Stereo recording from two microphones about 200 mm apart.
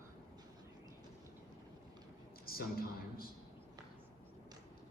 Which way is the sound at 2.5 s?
50° left (ahead or behind).